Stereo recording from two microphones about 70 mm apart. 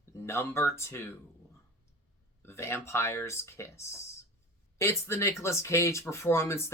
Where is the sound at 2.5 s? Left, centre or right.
Left.